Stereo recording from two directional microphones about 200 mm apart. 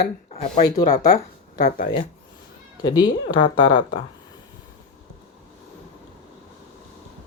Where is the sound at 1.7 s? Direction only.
50° left (ahead or behind).